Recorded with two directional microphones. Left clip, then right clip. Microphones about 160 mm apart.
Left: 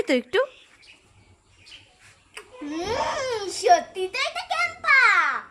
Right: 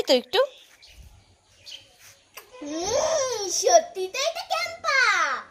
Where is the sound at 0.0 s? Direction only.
5° left (ahead or behind).